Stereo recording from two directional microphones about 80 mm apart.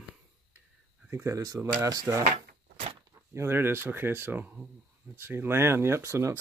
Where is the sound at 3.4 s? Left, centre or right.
Right.